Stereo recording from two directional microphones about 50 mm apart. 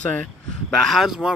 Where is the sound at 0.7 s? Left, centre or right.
Centre.